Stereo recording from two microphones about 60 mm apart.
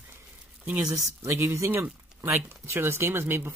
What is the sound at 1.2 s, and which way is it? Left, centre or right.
Speech, right.